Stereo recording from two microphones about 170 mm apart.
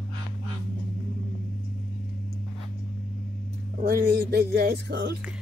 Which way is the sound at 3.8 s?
65° right (ahead or behind).